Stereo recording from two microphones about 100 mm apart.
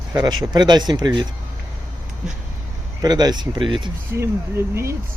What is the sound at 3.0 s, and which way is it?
Speech, 40° right (ahead or behind).